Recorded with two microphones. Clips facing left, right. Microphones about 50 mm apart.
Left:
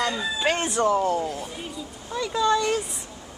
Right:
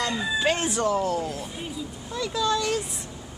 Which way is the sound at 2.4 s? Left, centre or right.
Centre.